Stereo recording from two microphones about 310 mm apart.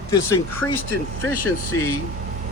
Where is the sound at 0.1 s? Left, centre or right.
Centre.